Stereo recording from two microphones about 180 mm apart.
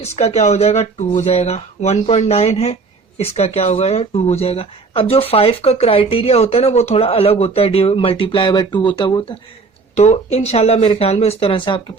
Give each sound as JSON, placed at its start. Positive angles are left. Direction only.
{"t": 0.2, "sound": "speech", "side_deg": 35}
{"t": 9.9, "sound": "speech", "side_deg": 40}